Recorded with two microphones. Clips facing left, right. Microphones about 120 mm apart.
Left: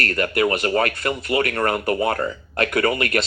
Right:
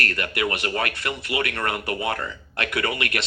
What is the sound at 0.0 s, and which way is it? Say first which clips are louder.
Speech: left 6 dB; 35° left (ahead or behind).